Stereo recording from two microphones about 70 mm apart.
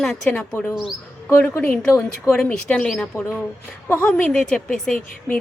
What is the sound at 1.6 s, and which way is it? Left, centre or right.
A woman's voice, left.